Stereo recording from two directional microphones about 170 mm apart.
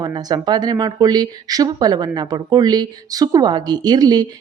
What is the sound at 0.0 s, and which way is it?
Speech, 25° right (ahead or behind).